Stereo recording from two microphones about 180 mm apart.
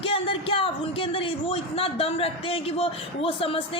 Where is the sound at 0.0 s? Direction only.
30° left (ahead or behind).